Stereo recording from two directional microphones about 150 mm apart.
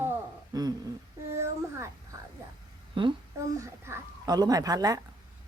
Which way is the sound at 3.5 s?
20° right (ahead or behind).